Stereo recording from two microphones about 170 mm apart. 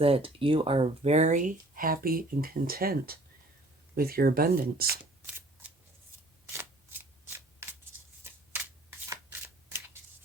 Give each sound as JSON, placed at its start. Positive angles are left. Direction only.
{"t": 0.0, "sound": "speech", "side_deg": -35}
{"t": 6.5, "sound": "shuffling cards", "side_deg": -15}
{"t": 9.6, "sound": "a sound", "side_deg": -15}